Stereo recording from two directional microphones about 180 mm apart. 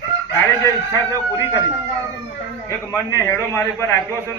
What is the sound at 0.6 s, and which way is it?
Speech, 15° left (ahead or behind).